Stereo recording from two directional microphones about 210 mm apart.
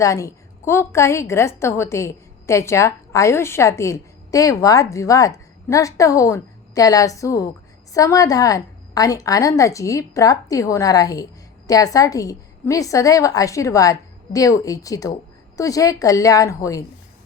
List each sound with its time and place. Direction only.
0.0 s a woman's voice: 15° left (ahead or behind)